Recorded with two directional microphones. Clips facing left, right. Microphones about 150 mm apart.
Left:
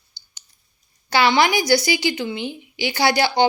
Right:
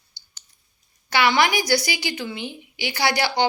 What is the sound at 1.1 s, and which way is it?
A woman's voice, 25° left (ahead or behind).